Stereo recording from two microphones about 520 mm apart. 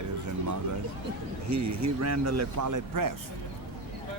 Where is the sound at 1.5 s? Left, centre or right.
Right.